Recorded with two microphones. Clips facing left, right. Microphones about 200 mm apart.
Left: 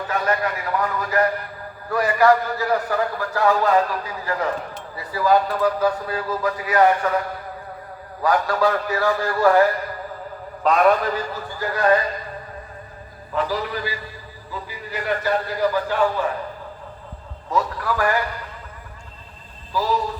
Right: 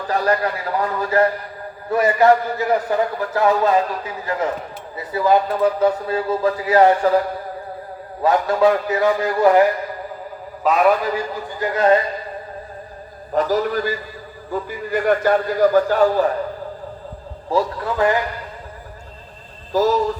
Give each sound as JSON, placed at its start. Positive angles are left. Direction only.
{"t": 0.1, "sound": "a man's voice", "side_deg": -35}
{"t": 8.2, "sound": "a man's voice", "side_deg": -25}
{"t": 10.6, "sound": "a man's voice", "side_deg": -5}
{"t": 13.3, "sound": "a man's voice", "side_deg": -45}
{"t": 17.5, "sound": "a man's voice", "side_deg": -30}
{"t": 19.7, "sound": "a man's voice", "side_deg": -45}